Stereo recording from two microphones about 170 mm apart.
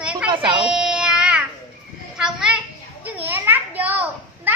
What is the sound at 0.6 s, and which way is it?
Child singing, 5° right (ahead or behind).